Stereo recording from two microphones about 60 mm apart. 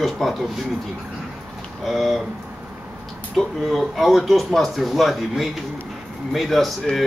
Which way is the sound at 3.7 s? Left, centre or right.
Centre.